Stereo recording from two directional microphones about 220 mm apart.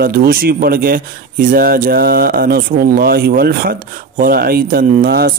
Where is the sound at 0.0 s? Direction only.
45° right (ahead or behind).